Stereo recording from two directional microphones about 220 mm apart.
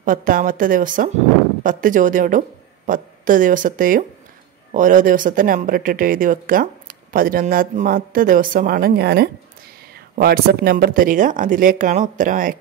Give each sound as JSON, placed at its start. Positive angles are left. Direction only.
{"t": 0.0, "sound": "speech", "side_deg": -40}